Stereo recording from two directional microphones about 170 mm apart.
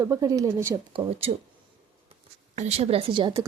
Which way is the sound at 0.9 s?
40° right (ahead or behind).